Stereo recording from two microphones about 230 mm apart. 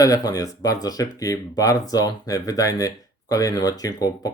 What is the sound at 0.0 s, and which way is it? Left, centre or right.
Speech, centre.